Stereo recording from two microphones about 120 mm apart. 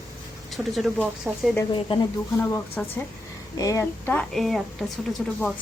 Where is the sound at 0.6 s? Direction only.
10° right (ahead or behind).